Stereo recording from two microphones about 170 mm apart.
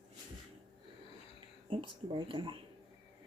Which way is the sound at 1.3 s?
30° right (ahead or behind).